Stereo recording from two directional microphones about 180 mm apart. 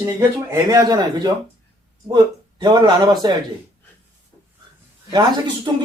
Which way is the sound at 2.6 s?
25° right (ahead or behind).